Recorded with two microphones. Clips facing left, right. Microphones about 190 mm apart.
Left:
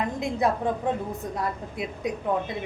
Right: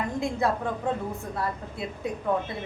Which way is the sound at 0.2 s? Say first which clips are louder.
Even; 20° left (ahead or behind).